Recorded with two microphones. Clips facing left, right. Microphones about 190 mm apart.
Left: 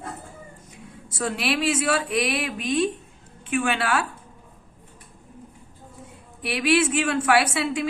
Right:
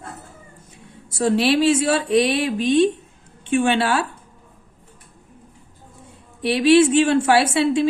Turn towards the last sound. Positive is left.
turn(degrees=-30)  # may be behind; listen again after turning